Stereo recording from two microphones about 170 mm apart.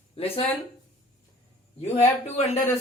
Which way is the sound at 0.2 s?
35° left (ahead or behind).